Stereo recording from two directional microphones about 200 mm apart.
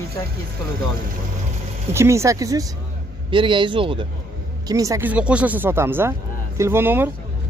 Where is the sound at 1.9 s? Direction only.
15° right (ahead or behind).